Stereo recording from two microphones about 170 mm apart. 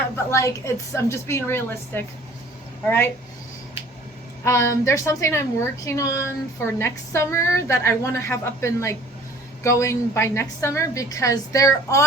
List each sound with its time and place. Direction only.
0.3 s a woman's voice: 15° left (ahead or behind)
4.4 s a woman's voice: 15° left (ahead or behind)